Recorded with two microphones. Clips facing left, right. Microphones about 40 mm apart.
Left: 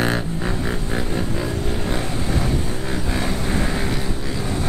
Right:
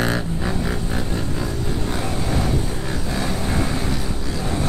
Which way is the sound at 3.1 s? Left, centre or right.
Centre.